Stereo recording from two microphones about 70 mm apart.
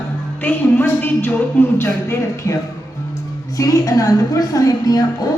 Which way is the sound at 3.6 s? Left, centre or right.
Left.